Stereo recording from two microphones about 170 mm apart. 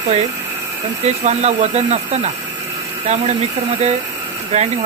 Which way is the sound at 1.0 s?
40° right (ahead or behind).